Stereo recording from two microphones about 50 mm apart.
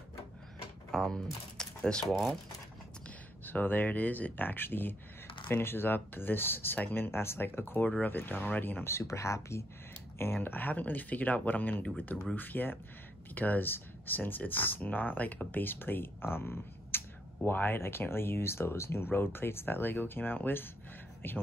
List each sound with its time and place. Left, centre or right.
0.9 s speech: centre
2.0 s speech: centre
3.4 s speech: left
7.8 s speech: left
8.9 s speech: left
10.1 s speech: left